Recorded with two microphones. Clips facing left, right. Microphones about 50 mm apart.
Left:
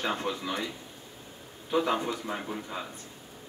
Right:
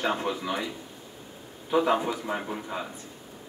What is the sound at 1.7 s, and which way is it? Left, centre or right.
A man's voice, centre.